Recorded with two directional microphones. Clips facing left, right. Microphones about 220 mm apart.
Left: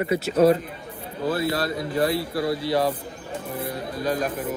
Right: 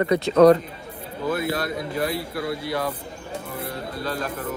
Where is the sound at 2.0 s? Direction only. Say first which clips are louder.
Left 5 dB; 25° left (ahead or behind).